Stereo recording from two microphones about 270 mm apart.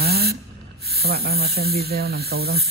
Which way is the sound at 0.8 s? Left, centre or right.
Right.